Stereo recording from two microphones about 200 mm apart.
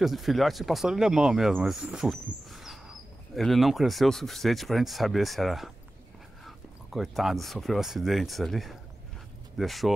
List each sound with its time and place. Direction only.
0.0 s speech: centre (ahead or behind)